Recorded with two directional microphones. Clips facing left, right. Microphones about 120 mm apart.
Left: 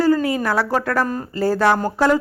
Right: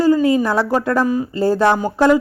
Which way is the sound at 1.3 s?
20° right (ahead or behind).